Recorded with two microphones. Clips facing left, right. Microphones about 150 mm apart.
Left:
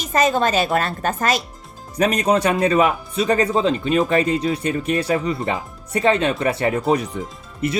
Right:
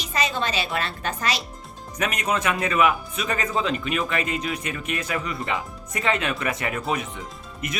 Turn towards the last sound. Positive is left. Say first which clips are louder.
# left 9 dB
turn(degrees=35)  # may be behind; listen again after turning